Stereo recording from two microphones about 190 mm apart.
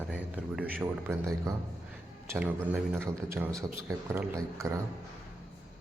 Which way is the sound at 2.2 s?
10° right (ahead or behind).